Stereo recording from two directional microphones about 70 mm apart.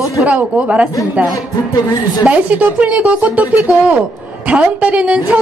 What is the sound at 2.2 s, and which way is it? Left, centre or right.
A woman's voice, right.